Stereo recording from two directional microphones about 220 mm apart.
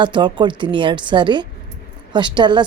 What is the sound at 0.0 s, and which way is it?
Speech, 20° right (ahead or behind).